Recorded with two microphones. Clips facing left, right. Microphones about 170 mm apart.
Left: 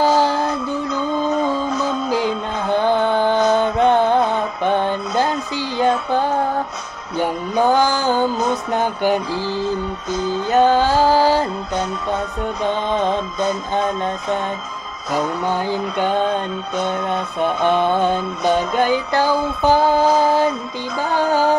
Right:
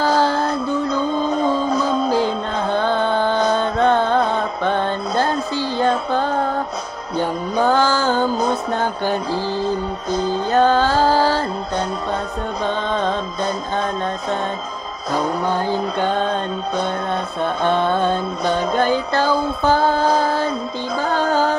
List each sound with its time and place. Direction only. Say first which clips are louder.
0.0 s a sound: left 1 dB; 15° left (ahead or behind)
0.8 s music: right 1 dB; 30° right (ahead or behind)
2.0 s music: right 1 dB; 15° left (ahead or behind)
10.5 s music: left 1 dB; 15° left (ahead or behind)
12.6 s music: left 2 dB; 15° left (ahead or behind)
15.7 s music: even; 15° left (ahead or behind)
17.4 s music: left 2 dB; 15° left (ahead or behind)